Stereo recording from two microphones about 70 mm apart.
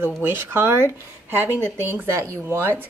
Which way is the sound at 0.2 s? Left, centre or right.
Right.